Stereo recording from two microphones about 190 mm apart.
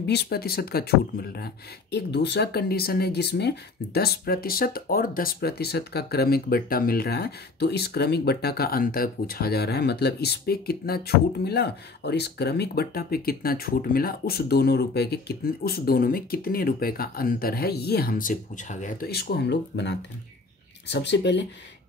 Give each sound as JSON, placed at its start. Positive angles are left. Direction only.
{"t": 0.0, "sound": "speech", "side_deg": 60}